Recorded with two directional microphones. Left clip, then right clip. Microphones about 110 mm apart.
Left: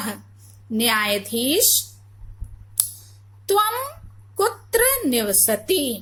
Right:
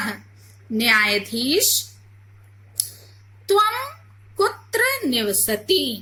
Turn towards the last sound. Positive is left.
turn(degrees=30)  # may be behind; listen again after turning